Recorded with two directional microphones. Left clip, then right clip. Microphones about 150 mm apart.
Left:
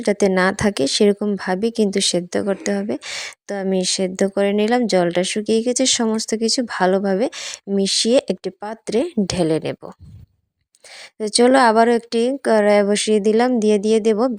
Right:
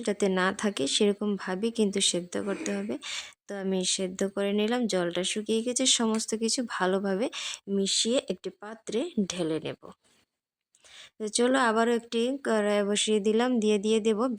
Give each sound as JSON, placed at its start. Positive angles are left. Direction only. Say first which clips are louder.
{"t": 0.0, "sound": "speech", "louder": "left 10 dB", "side_deg": 40}
{"t": 11.2, "sound": "speech", "louder": "left 11 dB", "side_deg": 40}